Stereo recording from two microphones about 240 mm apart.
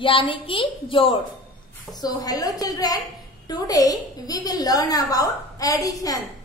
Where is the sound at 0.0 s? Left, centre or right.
Left.